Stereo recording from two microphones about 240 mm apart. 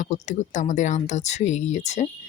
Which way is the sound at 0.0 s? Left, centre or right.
Left.